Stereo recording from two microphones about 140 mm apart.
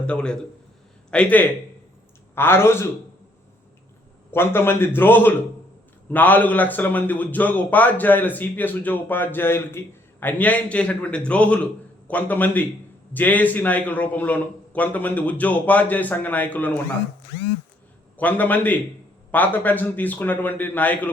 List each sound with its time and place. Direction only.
0.0 s a man's voice: 5° left (ahead or behind)
4.3 s a man's voice: 15° left (ahead or behind)
18.2 s a man's voice: 10° left (ahead or behind)